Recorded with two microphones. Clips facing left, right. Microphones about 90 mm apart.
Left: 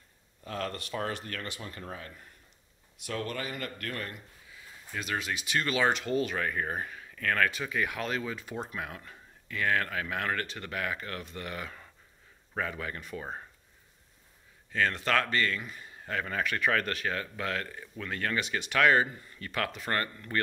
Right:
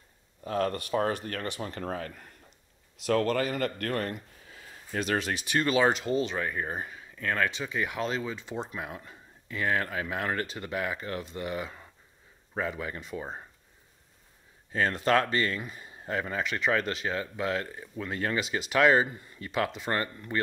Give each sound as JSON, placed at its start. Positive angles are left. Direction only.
{"t": 0.4, "sound": "speech", "side_deg": -30}
{"t": 1.7, "sound": "speech", "side_deg": -55}
{"t": 5.6, "sound": "speech", "side_deg": -30}
{"t": 6.0, "sound": "speech", "side_deg": -20}
{"t": 14.7, "sound": "speech", "side_deg": -30}